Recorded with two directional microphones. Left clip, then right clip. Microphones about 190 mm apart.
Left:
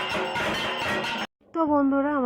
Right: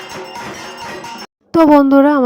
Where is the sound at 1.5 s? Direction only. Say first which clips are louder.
Right 14 dB; 50° right (ahead or behind).